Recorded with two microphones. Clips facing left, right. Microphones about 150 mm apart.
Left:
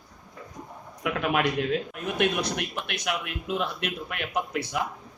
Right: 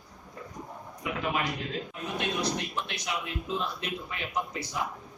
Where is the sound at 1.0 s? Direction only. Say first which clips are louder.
Left 5 dB; 70° left (ahead or behind).